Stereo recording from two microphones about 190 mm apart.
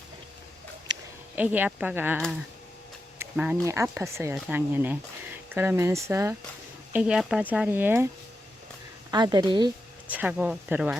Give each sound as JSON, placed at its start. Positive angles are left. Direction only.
{"t": 1.4, "sound": "speech", "side_deg": -10}
{"t": 3.2, "sound": "a sound", "side_deg": -5}
{"t": 3.7, "sound": "speech", "side_deg": -15}
{"t": 9.1, "sound": "a woman's voice", "side_deg": -20}
{"t": 10.1, "sound": "speech", "side_deg": -10}